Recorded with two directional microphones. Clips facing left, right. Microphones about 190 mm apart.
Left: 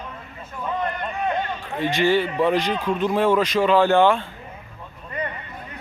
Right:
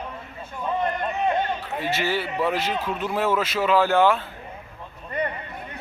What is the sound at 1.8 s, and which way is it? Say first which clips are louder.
Speech: left 8 dB; 5° right (ahead or behind).